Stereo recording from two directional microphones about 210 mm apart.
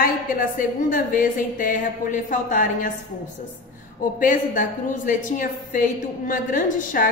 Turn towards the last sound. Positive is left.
turn(degrees=40)  # may be behind; listen again after turning